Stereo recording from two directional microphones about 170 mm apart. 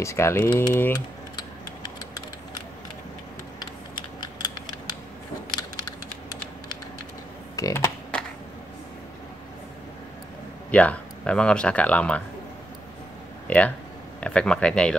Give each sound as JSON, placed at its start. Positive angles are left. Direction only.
{"t": 0.0, "sound": "speech", "side_deg": 15}
{"t": 7.5, "sound": "typing", "side_deg": 15}
{"t": 10.7, "sound": "speech", "side_deg": 10}
{"t": 13.5, "sound": "speech", "side_deg": 10}